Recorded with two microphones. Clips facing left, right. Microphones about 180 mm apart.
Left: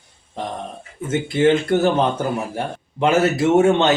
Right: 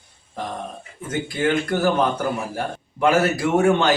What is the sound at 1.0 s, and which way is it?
A man's voice, 25° left (ahead or behind).